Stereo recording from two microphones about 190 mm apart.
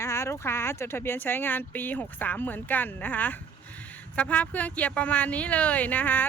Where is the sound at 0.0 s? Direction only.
15° left (ahead or behind).